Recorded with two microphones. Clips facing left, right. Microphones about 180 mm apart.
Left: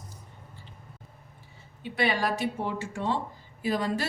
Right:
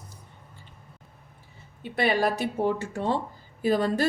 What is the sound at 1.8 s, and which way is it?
A woman's voice, 45° right (ahead or behind).